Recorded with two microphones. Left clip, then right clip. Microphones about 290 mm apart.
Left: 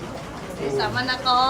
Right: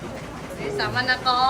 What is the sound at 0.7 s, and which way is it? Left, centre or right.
Speech, centre.